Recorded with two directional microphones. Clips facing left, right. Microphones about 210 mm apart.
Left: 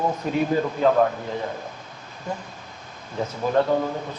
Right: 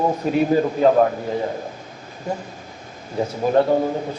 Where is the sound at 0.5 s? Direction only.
35° right (ahead or behind).